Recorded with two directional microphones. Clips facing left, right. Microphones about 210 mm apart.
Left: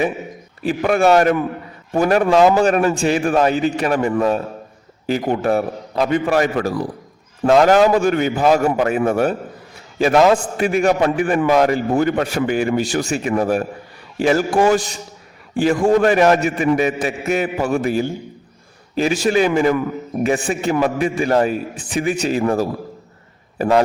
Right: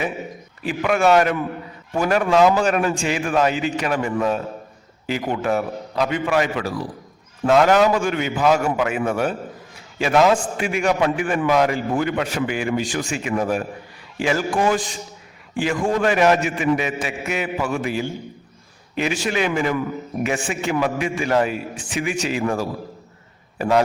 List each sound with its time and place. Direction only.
0.7 s a man's voice: 35° left (ahead or behind)
14.6 s a man's voice: 70° left (ahead or behind)
15.6 s a man's voice: 40° left (ahead or behind)